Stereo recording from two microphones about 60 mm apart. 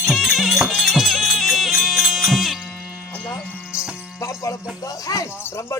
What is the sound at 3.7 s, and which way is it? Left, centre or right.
Music, centre.